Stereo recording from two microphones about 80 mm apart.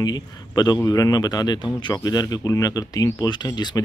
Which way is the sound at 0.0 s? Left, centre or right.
Left.